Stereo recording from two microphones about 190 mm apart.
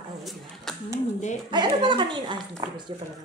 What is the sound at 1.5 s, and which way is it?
Speech, 25° right (ahead or behind).